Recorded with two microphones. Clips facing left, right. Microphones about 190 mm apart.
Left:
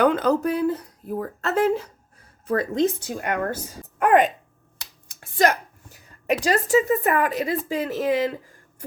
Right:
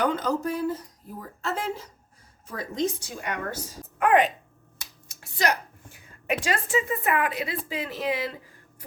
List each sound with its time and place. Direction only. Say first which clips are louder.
0.0 s a woman's voice: left 6 dB; 60° left (ahead or behind); by 8.3 s 45° left (ahead or behind)